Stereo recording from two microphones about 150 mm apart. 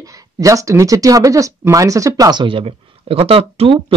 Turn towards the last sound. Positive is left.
turn(degrees=-40)  # may be behind; listen again after turning